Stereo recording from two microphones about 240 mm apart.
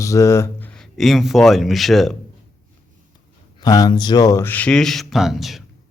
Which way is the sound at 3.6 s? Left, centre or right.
Centre.